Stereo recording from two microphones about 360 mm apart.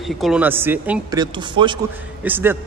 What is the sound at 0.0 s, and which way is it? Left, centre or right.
A man's voice, centre.